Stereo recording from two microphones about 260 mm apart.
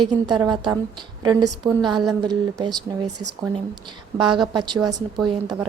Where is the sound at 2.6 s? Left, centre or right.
Centre.